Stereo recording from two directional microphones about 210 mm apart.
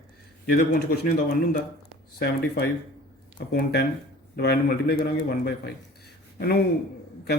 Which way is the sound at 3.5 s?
50° left (ahead or behind).